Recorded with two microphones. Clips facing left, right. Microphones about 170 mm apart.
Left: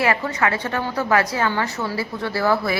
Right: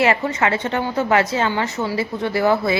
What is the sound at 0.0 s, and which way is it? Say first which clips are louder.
A woman's voice: right 3 dB; 25° right (ahead or behind).